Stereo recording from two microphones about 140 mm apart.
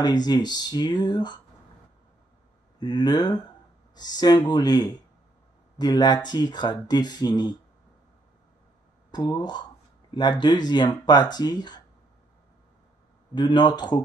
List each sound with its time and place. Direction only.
0.0 s speech: 30° left (ahead or behind)
2.8 s speech: 30° left (ahead or behind)
9.1 s speech: 30° left (ahead or behind)
13.3 s speech: 30° left (ahead or behind)